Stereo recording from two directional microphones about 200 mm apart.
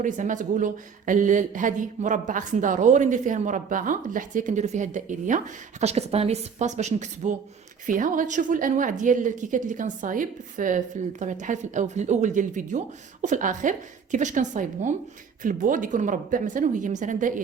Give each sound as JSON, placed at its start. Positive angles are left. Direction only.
{"t": 0.0, "sound": "speech", "side_deg": -40}